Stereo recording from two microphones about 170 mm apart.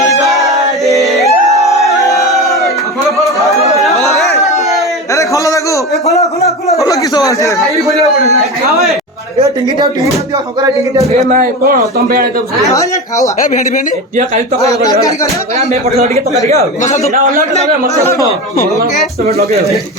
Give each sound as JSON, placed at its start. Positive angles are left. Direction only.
{"t": 0.0, "sound": "music", "side_deg": 0}
{"t": 1.6, "sound": "crowd", "side_deg": 20}
{"t": 2.5, "sound": "crowd", "side_deg": 0}
{"t": 4.1, "sound": "a sound", "side_deg": 0}
{"t": 5.1, "sound": "a sound", "side_deg": 20}
{"t": 7.6, "sound": "a man's voice", "side_deg": 0}
{"t": 9.4, "sound": "a woman's voice", "side_deg": -30}
{"t": 11.3, "sound": "a man's voice", "side_deg": -55}
{"t": 12.7, "sound": "speech", "side_deg": 20}
{"t": 16.8, "sound": "a man's voice", "side_deg": 45}
{"t": 18.1, "sound": "speech", "side_deg": 15}